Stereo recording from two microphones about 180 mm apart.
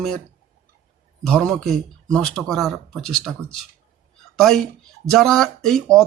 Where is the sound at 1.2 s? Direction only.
5° left (ahead or behind).